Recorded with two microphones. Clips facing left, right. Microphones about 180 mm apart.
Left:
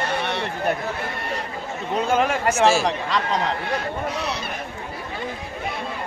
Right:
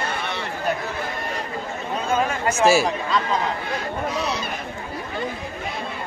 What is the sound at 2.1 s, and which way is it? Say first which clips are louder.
Speech: left 1 dB; 75° left (ahead or behind).